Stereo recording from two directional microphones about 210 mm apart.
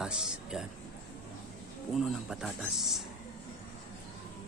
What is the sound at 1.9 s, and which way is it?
Speech, centre (ahead or behind).